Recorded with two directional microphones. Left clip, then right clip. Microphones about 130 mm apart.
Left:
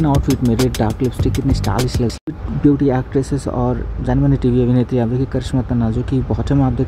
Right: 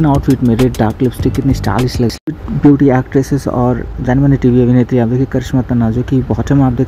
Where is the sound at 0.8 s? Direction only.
40° right (ahead or behind).